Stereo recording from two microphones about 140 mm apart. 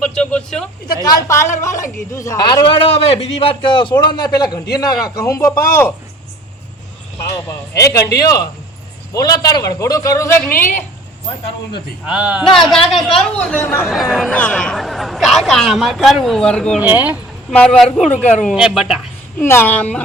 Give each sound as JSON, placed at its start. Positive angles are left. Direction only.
{"t": 0.0, "sound": "a sound", "side_deg": 5}
{"t": 1.0, "sound": "a man's voice", "side_deg": 20}
{"t": 7.4, "sound": "a man's voice", "side_deg": 20}
{"t": 11.3, "sound": "a man's voice", "side_deg": 40}
{"t": 12.0, "sound": "a man's voice", "side_deg": -10}
{"t": 13.8, "sound": "a man's voice", "side_deg": 0}
{"t": 14.3, "sound": "a man's voice", "side_deg": 10}
{"t": 16.8, "sound": "a man's voice", "side_deg": -15}
{"t": 17.5, "sound": "a man's voice", "side_deg": 5}
{"t": 18.5, "sound": "a man's voice", "side_deg": -5}
{"t": 19.4, "sound": "a woman's voice", "side_deg": 15}